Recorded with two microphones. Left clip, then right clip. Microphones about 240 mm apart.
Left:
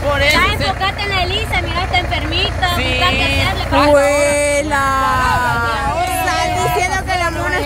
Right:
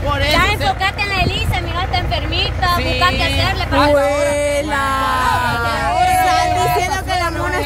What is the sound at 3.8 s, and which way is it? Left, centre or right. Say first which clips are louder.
Speech: left 2 dB; centre.